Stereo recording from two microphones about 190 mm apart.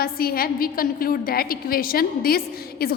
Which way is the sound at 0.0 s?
50° left (ahead or behind).